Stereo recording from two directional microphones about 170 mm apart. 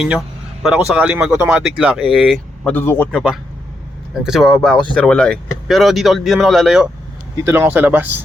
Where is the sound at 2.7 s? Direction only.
10° left (ahead or behind).